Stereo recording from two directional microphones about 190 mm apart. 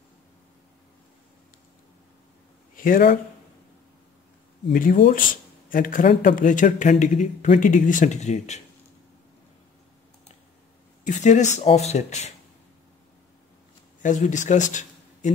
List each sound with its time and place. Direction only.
2.7 s speech: 45° left (ahead or behind)
5.0 s speech: 45° left (ahead or behind)
11.1 s speech: 40° left (ahead or behind)
14.0 s speech: 40° left (ahead or behind)